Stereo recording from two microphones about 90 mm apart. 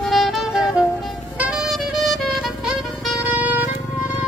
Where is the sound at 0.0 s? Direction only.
Centre (ahead or behind).